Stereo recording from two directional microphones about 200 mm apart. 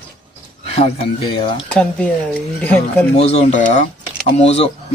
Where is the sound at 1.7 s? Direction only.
5° left (ahead or behind).